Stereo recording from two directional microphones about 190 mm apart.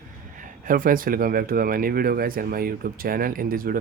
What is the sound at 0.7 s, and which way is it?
Speech, 45° right (ahead or behind).